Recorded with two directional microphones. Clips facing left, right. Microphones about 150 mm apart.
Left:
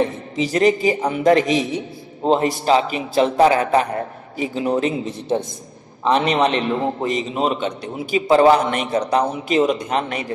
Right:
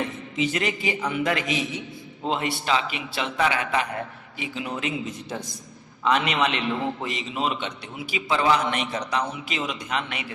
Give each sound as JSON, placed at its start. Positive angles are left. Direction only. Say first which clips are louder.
{"t": 0.0, "sound": "a man's voice", "louder": "left 6 dB", "side_deg": 35}